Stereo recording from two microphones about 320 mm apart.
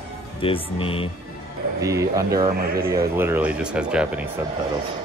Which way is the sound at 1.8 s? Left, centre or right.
Centre.